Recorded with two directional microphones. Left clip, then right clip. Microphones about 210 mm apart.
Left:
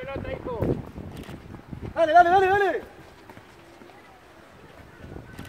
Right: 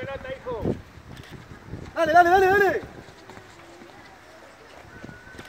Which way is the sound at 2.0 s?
45° right (ahead or behind).